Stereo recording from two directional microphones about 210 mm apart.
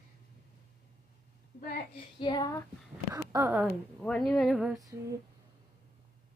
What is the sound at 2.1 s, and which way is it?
Speech, 20° left (ahead or behind).